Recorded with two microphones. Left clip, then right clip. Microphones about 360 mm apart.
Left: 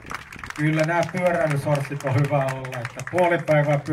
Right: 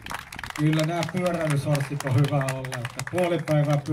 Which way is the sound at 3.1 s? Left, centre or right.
Left.